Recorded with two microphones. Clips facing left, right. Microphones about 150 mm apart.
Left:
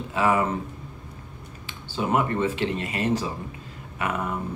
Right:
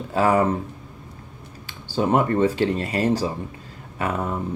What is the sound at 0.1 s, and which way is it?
Speech, 40° right (ahead or behind).